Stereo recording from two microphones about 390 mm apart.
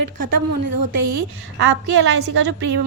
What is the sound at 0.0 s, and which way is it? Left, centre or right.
A woman's voice, right.